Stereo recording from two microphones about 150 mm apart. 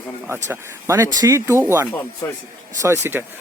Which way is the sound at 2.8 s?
15° right (ahead or behind).